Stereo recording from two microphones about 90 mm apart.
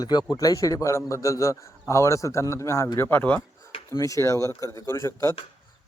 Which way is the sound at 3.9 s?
35° left (ahead or behind).